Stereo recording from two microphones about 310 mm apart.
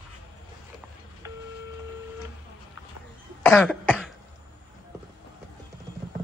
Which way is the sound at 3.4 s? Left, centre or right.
Centre.